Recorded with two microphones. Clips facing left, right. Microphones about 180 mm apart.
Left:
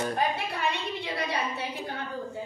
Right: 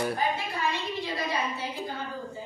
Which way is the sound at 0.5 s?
65° left (ahead or behind).